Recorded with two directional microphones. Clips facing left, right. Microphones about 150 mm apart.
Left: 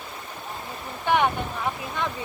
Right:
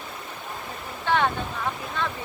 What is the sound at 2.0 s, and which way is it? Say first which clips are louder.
Vehicle: even; 15° left (ahead or behind).